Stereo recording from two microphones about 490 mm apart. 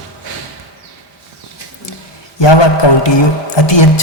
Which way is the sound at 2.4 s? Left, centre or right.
Left.